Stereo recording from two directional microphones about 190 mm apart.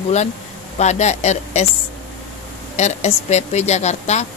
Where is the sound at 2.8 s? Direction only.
35° left (ahead or behind).